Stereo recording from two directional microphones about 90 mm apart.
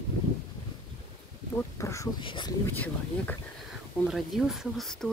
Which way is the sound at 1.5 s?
35° left (ahead or behind).